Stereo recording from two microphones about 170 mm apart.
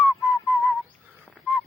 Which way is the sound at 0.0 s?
Centre (ahead or behind).